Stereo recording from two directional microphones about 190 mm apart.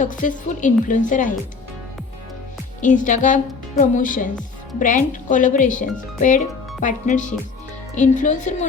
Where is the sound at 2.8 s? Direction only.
40° left (ahead or behind).